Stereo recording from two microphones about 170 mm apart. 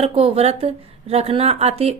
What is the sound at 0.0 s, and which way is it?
A woman's voice, 35° right (ahead or behind).